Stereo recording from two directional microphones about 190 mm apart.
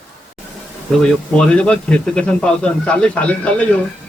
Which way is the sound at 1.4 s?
5° left (ahead or behind).